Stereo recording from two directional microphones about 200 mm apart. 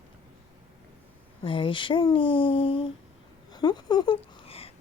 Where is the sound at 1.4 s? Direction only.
25° left (ahead or behind).